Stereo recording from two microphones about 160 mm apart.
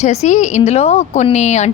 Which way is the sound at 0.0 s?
45° left (ahead or behind).